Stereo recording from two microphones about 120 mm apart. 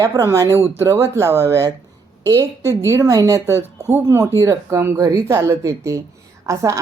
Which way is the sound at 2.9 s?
25° right (ahead or behind).